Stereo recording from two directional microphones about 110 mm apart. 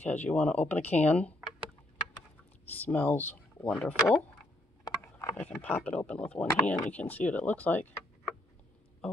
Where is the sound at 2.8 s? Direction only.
15° left (ahead or behind).